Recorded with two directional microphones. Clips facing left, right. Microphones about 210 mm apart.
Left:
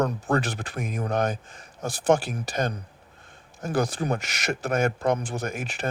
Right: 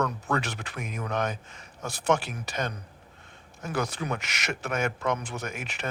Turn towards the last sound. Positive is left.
turn(degrees=35)  # may be behind; listen again after turning